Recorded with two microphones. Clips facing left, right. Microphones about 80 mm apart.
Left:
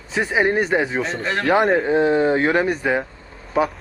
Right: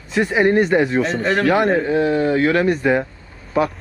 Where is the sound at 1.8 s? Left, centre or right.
Left.